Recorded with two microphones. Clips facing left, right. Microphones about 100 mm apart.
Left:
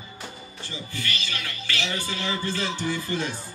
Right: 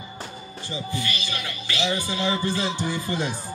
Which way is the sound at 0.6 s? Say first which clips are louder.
Right 6 dB; 15° right (ahead or behind).